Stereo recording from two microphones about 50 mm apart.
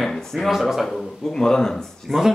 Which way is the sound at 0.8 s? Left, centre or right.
Centre.